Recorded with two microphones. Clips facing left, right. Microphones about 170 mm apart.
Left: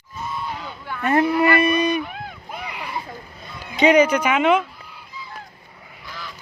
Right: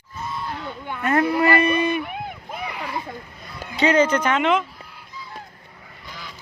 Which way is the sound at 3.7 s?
15° left (ahead or behind).